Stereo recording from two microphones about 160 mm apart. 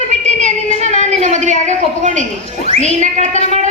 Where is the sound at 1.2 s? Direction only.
50° right (ahead or behind).